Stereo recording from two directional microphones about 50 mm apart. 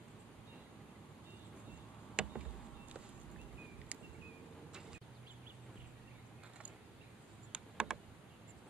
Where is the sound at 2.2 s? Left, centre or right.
Centre.